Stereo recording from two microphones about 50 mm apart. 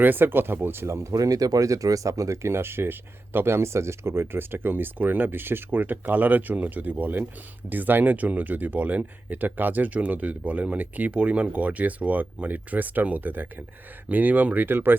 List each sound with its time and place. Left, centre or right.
0.0 s speech: right
1.6 s speech: right